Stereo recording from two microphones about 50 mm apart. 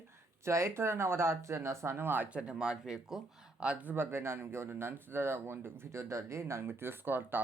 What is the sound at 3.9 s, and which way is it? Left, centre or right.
Speech, right.